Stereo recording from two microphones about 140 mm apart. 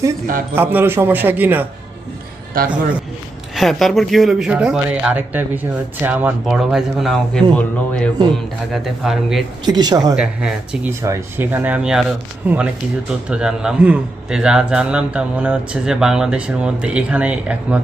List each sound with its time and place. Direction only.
0.5 s a man's voice: 15° right (ahead or behind)
2.5 s a man's voice: 90° right
3.5 s a man's voice: centre (ahead or behind)
6.4 s speech: centre (ahead or behind)
9.6 s speech: 30° right (ahead or behind)
10.2 s speech: 5° right (ahead or behind)
11.0 s a man's voice: 20° right (ahead or behind)